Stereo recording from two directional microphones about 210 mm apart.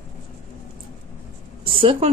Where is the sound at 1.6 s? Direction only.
25° right (ahead or behind).